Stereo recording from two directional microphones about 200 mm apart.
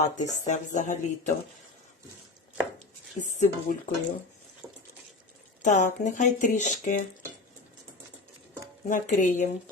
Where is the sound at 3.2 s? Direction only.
35° left (ahead or behind).